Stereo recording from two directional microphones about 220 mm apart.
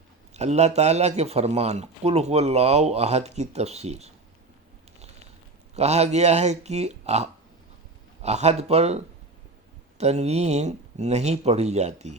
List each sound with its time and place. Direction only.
0.3 s speech: 30° right (ahead or behind)
5.7 s speech: 30° right (ahead or behind)